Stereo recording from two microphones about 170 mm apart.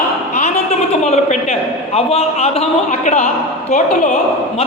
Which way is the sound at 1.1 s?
40° left (ahead or behind).